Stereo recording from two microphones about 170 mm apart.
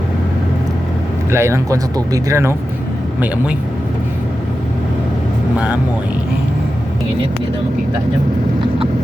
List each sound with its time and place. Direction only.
1.3 s speech: 15° right (ahead or behind)